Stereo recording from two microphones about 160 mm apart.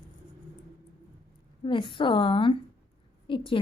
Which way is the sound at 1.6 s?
30° left (ahead or behind).